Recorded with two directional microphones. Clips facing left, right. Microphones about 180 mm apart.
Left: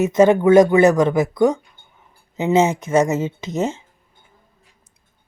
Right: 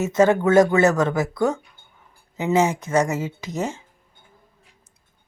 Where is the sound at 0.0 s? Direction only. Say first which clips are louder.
Left 4 dB; 20° left (ahead or behind).